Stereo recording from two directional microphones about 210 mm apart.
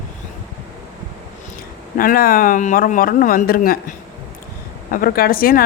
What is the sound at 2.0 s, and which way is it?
Speech, 45° left (ahead or behind).